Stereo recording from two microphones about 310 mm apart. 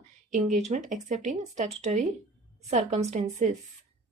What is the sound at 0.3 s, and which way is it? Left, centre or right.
Speech, right.